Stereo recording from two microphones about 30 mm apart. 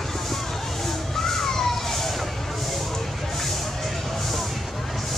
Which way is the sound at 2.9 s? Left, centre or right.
Centre.